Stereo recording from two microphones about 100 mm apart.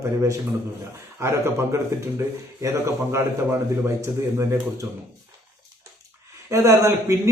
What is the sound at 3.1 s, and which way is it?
A man's voice, 25° right (ahead or behind).